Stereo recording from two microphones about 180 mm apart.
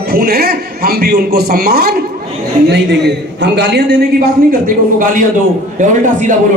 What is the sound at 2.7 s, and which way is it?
A man's voice, 70° right (ahead or behind).